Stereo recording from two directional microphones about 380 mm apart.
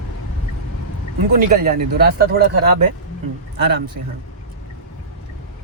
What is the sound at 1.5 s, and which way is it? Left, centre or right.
Speech, centre.